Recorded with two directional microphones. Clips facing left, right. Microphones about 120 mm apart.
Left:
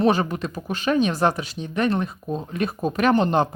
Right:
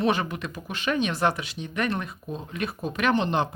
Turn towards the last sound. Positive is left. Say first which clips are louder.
# left 5 dB
turn(degrees=45)  # may be behind; listen again after turning